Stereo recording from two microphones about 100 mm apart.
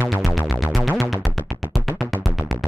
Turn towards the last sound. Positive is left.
turn(degrees=0)  # may be behind; listen again after turning